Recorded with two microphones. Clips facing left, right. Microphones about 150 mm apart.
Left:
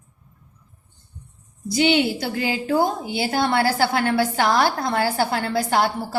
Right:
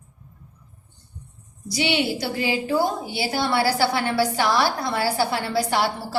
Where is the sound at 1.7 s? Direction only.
50° left (ahead or behind).